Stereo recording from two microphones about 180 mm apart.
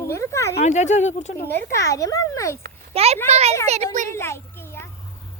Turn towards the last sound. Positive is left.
turn(degrees=15)  # may be behind; listen again after turning